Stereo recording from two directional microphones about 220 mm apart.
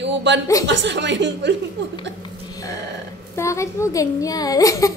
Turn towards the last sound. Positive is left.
turn(degrees=15)  # may be behind; listen again after turning